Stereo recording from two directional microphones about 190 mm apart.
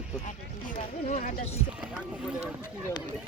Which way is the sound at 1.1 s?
40° left (ahead or behind).